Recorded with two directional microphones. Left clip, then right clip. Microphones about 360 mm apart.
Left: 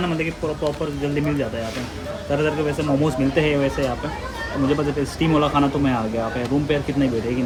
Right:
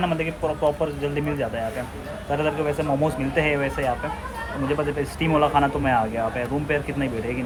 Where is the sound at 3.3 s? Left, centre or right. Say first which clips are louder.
Left 2 dB; left.